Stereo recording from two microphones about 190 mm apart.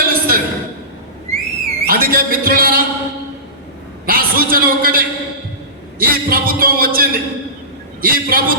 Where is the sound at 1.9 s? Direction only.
50° right (ahead or behind).